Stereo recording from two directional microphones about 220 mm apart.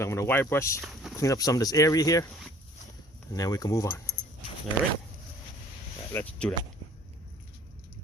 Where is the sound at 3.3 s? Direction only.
15° left (ahead or behind).